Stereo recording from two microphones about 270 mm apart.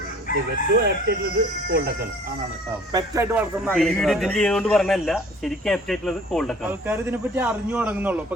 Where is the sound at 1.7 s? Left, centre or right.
Right.